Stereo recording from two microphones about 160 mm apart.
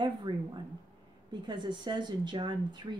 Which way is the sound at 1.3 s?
30° right (ahead or behind).